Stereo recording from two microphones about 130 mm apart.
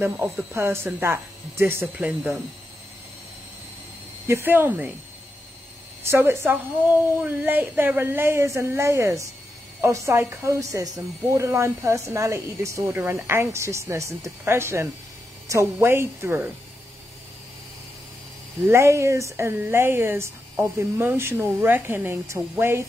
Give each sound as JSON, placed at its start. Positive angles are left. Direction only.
{"t": 0.0, "sound": "speech", "side_deg": -15}
{"t": 2.0, "sound": "speech", "side_deg": -5}
{"t": 4.3, "sound": "speech", "side_deg": -15}
{"t": 6.0, "sound": "speech", "side_deg": -20}
{"t": 18.7, "sound": "speech", "side_deg": -20}